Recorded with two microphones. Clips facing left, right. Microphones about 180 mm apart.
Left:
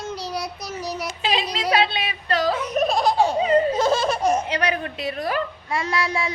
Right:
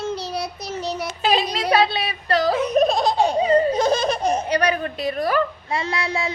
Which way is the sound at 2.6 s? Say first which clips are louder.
Right 3 dB; 20° right (ahead or behind).